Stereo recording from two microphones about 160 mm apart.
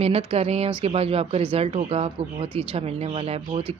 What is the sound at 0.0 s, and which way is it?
Speech, 40° right (ahead or behind).